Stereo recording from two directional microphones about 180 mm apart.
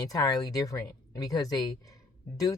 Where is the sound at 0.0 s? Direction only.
20° left (ahead or behind).